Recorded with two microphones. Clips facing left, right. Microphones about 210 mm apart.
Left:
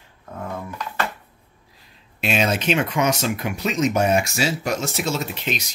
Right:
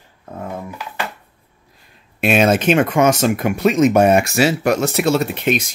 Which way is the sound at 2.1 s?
55° right (ahead or behind).